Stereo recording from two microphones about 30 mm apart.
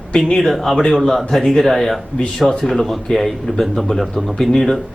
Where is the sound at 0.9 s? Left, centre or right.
Centre.